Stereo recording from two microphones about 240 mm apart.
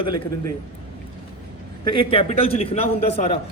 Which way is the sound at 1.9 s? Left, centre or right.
Left.